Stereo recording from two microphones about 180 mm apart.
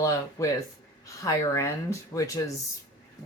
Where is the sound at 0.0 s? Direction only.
20° left (ahead or behind).